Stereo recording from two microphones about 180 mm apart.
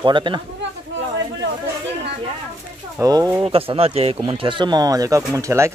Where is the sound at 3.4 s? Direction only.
30° right (ahead or behind).